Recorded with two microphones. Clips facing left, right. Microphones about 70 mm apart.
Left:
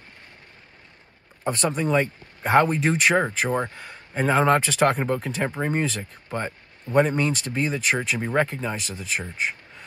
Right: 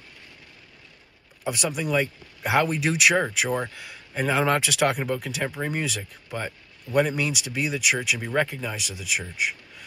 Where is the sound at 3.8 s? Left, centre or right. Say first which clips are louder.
Left 2 dB; left.